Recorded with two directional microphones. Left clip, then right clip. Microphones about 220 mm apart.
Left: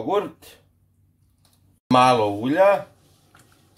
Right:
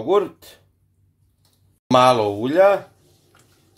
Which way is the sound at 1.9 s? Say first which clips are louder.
Right 2 dB; 40° right (ahead or behind).